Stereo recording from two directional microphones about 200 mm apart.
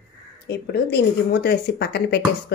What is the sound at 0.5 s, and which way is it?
Speech, 55° left (ahead or behind).